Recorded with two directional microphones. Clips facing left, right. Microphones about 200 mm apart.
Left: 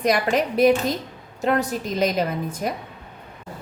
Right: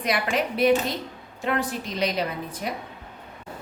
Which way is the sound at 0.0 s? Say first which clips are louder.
Left 5 dB; 45° left (ahead or behind).